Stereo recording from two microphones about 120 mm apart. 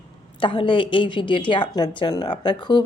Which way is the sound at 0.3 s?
45° left (ahead or behind).